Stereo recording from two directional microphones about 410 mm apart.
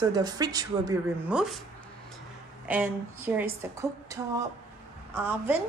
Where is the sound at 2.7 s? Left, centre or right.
Centre.